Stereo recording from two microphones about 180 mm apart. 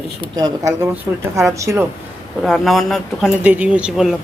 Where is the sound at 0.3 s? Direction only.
20° right (ahead or behind).